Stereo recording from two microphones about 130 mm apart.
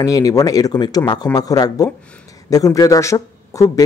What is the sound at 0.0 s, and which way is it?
Speech, 30° left (ahead or behind).